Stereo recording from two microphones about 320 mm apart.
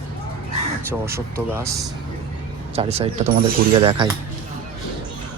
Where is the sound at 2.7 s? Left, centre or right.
Centre.